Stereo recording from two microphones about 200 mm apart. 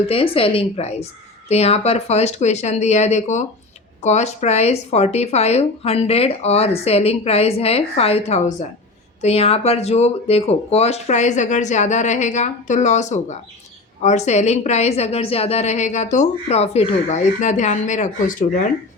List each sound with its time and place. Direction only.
0.1 s a woman's voice: 30° left (ahead or behind)